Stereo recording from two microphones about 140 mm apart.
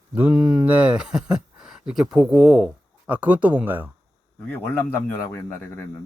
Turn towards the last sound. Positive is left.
turn(degrees=15)  # may be behind; listen again after turning